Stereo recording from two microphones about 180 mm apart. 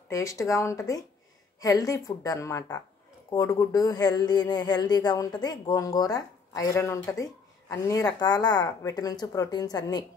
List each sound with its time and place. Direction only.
0.1 s speech: 20° left (ahead or behind)